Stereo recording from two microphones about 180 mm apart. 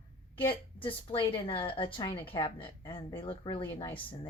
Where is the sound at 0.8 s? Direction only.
30° left (ahead or behind).